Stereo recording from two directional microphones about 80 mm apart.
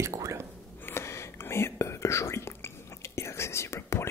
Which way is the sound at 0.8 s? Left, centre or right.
Left.